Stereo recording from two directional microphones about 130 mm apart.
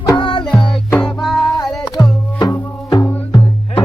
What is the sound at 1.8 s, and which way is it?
Music, 35° left (ahead or behind).